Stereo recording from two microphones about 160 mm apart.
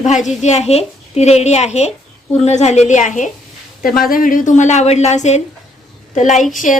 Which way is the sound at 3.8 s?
65° left (ahead or behind).